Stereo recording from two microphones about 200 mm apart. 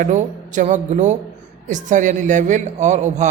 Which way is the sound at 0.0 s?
35° right (ahead or behind).